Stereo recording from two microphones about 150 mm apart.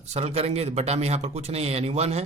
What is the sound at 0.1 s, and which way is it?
A man's voice, 45° right (ahead or behind).